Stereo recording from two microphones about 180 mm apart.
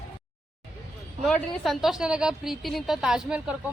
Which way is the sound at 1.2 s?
Centre (ahead or behind).